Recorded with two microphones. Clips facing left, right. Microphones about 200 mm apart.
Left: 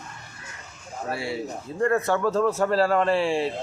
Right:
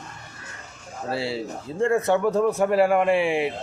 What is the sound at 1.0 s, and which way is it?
A man's voice, 30° right (ahead or behind).